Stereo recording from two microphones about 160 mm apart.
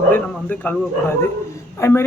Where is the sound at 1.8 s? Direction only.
15° left (ahead or behind).